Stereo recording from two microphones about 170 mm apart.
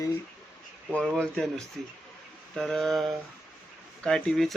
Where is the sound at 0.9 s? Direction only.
5° left (ahead or behind).